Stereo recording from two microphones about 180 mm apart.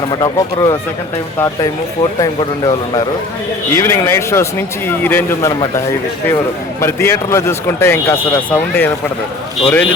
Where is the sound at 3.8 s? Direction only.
15° left (ahead or behind).